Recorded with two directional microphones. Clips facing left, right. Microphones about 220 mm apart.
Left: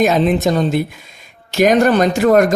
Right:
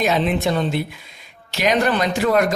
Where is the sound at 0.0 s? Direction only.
45° left (ahead or behind).